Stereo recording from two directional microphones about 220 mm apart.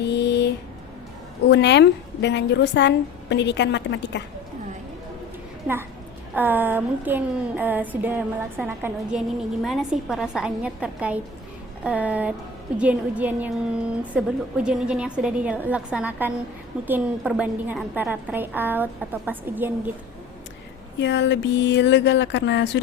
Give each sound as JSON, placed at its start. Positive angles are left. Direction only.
{"t": 0.0, "sound": "a sound", "side_deg": 50}
{"t": 1.5, "sound": "a woman's voice", "side_deg": 50}
{"t": 6.3, "sound": "a woman's voice", "side_deg": -10}
{"t": 21.0, "sound": "a woman's voice", "side_deg": 55}